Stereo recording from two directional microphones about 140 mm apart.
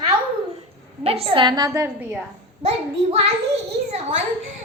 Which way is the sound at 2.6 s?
45° right (ahead or behind).